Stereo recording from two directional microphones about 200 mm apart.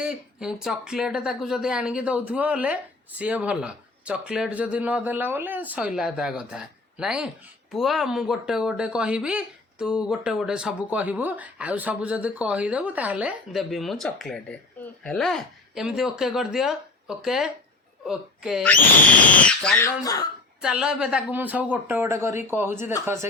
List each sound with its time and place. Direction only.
0.0 s speech: 5° right (ahead or behind)
20.0 s speech: 20° left (ahead or behind)
20.6 s a woman's voice: 5° right (ahead or behind)